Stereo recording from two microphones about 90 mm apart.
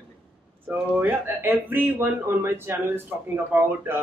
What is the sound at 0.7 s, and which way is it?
A man's voice, 20° right (ahead or behind).